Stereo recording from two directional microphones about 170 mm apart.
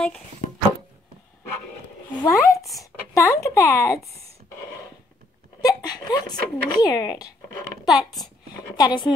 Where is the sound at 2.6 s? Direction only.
Centre (ahead or behind).